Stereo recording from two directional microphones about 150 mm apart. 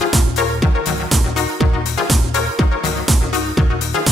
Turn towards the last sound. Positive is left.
turn(degrees=0)  # may be behind; listen again after turning